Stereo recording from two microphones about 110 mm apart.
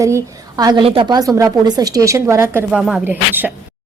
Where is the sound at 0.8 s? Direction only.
55° right (ahead or behind).